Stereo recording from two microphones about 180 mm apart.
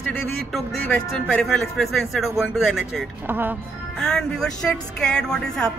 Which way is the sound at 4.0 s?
5° left (ahead or behind).